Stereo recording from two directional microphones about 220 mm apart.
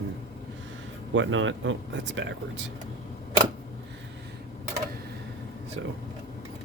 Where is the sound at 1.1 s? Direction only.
60° right (ahead or behind).